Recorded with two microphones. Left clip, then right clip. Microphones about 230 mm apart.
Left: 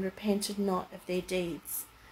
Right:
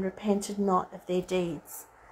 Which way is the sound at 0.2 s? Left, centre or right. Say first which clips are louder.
Right 3 dB; centre.